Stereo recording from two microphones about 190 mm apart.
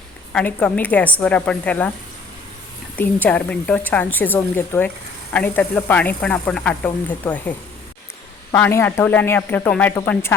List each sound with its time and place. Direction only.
0.3 s speech: 10° left (ahead or behind)
2.9 s speech: 10° left (ahead or behind)
8.5 s speech: 10° left (ahead or behind)